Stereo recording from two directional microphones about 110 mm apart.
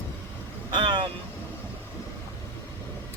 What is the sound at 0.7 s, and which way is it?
Vehicle, 45° right (ahead or behind).